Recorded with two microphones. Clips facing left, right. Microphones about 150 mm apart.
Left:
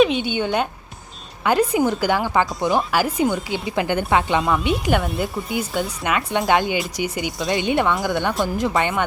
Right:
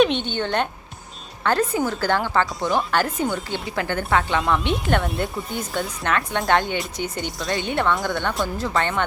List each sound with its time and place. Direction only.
0.0 s a woman's voice: 5° left (ahead or behind)
4.4 s speech: 5° left (ahead or behind)
7.3 s speech: 20° left (ahead or behind)
7.9 s speech: centre (ahead or behind)
8.5 s a woman's voice: 15° left (ahead or behind)